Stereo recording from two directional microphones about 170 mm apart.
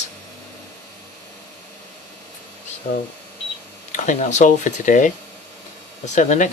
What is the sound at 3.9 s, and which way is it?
Speech, 45° left (ahead or behind).